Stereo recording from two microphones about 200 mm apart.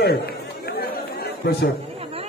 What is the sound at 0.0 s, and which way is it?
Chatter, 50° left (ahead or behind).